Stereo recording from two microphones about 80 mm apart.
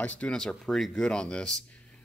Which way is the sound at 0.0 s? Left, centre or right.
Centre.